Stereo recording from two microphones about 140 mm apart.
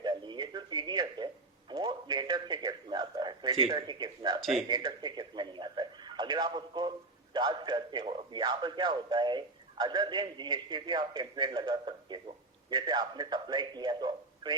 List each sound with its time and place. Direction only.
0.0 s a sound: 35° right (ahead or behind)
4.7 s radio: 30° right (ahead or behind)
7.3 s a man's voice: 30° right (ahead or behind)